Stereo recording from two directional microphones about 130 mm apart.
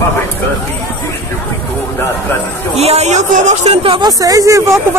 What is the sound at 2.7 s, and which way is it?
Speech, 55° right (ahead or behind).